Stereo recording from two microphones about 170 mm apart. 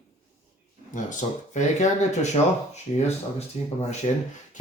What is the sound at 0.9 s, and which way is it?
Speech, 45° left (ahead or behind).